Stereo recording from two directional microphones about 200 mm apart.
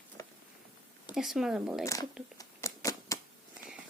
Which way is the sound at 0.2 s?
15° left (ahead or behind).